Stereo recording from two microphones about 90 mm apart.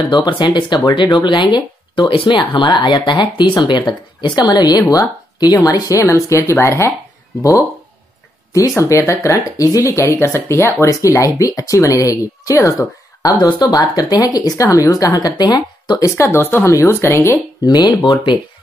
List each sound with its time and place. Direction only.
0.1 s speech: 60° left (ahead or behind); by 6.9 s 30° left (ahead or behind)
8.5 s speech: 35° left (ahead or behind)
16.2 s speech: 25° left (ahead or behind)
17.6 s speech: 50° left (ahead or behind)
17.9 s speech: 35° left (ahead or behind)